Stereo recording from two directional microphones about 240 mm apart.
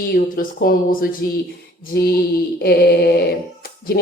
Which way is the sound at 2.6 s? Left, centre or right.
Left.